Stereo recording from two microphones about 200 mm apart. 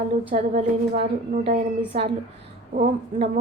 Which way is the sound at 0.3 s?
30° right (ahead or behind).